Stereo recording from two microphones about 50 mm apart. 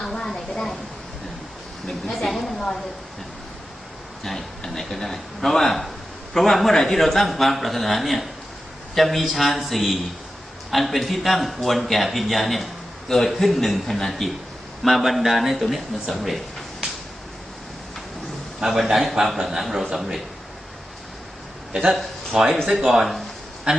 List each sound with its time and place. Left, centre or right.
0.0 s a sound: centre
1.9 s a man's voice: centre
4.2 s a man's voice: centre
18.6 s a man's voice: centre
22.3 s a man's voice: centre
23.7 s speech: right